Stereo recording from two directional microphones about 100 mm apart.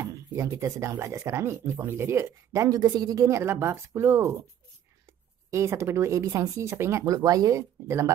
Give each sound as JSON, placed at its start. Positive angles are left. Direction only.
{"t": 0.0, "sound": "speech", "side_deg": -30}
{"t": 5.5, "sound": "speech", "side_deg": -30}
{"t": 7.2, "sound": "speech", "side_deg": -40}